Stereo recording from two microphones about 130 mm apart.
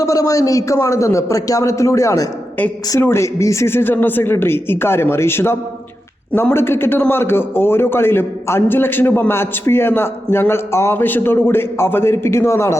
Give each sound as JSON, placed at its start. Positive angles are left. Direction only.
{"t": 0.0, "sound": "a man's voice", "side_deg": 25}